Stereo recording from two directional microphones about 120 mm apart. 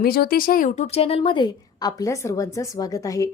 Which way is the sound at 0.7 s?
65° left (ahead or behind).